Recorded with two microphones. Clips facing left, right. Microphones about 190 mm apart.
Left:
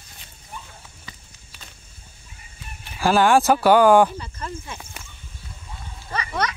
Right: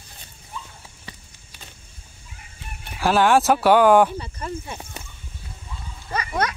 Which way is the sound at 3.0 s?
Centre (ahead or behind).